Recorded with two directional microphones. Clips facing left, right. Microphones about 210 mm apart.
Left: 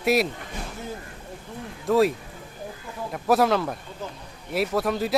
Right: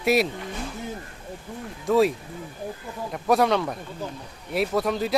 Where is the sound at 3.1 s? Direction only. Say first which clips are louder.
Even; centre (ahead or behind).